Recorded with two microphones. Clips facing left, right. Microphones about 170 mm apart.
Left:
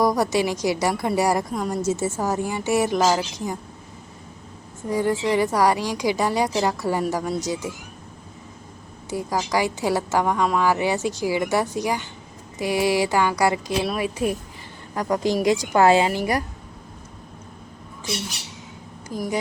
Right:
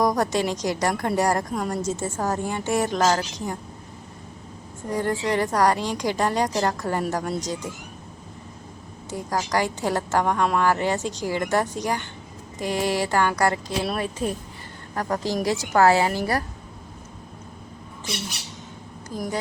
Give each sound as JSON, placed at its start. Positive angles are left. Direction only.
{"t": 0.0, "sound": "a woman's voice", "side_deg": 5}
{"t": 4.9, "sound": "a woman's voice", "side_deg": 5}
{"t": 9.0, "sound": "a woman's voice", "side_deg": 10}
{"t": 19.0, "sound": "speech", "side_deg": 10}